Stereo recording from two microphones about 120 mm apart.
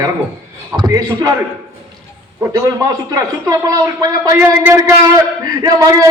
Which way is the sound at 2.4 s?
30° right (ahead or behind).